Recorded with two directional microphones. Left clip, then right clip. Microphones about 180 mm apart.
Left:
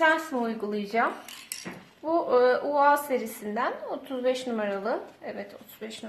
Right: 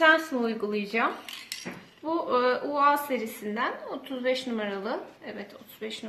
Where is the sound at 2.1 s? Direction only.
35° left (ahead or behind).